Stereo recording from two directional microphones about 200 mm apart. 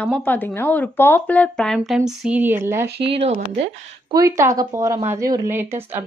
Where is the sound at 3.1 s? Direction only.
30° right (ahead or behind).